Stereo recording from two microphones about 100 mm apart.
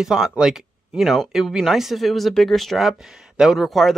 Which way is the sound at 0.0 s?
5° right (ahead or behind).